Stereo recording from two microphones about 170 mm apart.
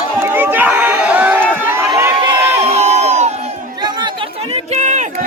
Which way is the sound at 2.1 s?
25° right (ahead or behind).